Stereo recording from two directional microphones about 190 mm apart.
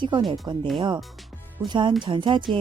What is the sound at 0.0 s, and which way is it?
Speech, 25° right (ahead or behind).